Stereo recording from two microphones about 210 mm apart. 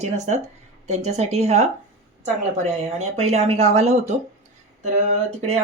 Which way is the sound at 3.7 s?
30° right (ahead or behind).